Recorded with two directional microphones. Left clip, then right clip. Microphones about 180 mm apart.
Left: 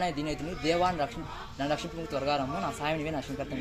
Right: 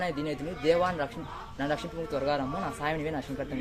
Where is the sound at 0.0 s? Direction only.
20° right (ahead or behind).